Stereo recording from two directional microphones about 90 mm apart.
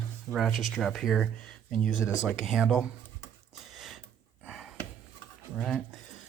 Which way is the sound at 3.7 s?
Centre (ahead or behind).